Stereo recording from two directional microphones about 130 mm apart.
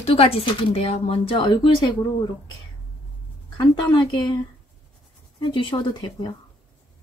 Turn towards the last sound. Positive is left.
turn(degrees=40)  # may be behind; listen again after turning